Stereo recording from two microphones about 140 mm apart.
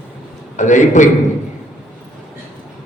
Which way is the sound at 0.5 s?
60° left (ahead or behind).